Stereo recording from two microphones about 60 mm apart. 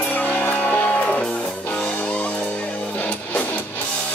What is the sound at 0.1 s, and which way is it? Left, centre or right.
Music, left.